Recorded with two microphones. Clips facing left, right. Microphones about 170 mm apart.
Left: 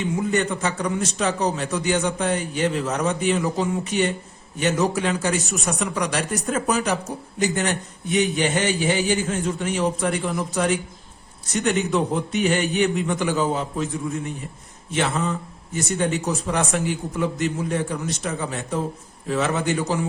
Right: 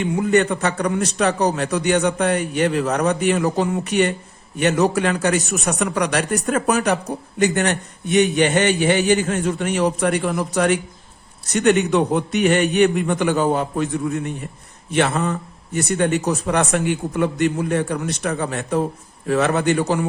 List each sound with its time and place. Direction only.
0.0 s speech: 65° right (ahead or behind)